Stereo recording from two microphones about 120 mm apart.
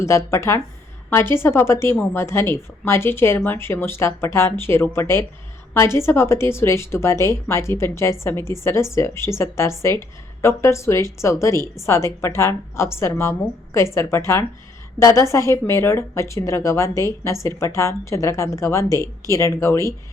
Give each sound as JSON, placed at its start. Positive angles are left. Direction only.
{"t": 0.0, "sound": "speech", "side_deg": 25}